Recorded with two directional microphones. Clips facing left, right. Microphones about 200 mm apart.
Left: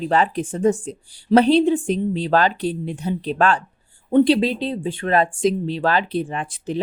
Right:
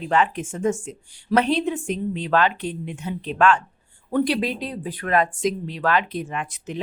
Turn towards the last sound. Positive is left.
turn(degrees=30)  # may be behind; listen again after turning